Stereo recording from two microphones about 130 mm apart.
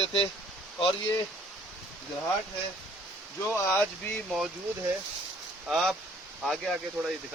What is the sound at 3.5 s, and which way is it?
Speech, 15° left (ahead or behind).